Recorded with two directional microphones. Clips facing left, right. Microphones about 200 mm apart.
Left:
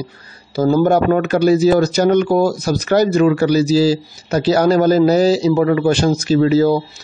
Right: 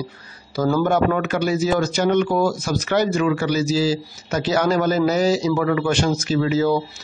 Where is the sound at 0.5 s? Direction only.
25° left (ahead or behind).